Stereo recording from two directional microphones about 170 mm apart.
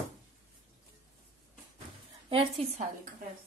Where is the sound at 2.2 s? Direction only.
35° right (ahead or behind).